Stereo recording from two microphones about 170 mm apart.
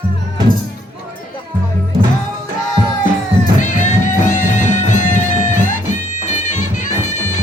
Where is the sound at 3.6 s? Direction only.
45° left (ahead or behind).